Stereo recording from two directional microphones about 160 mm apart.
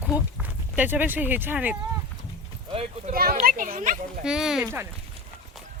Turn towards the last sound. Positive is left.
turn(degrees=-5)  # may be behind; listen again after turning